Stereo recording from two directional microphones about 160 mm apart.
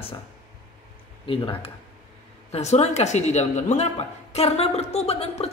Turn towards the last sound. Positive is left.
turn(degrees=40)  # may be behind; listen again after turning